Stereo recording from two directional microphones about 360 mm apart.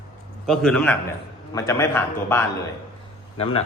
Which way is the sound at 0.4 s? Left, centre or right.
Centre.